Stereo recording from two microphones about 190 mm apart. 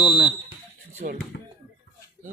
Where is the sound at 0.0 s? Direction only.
5° right (ahead or behind).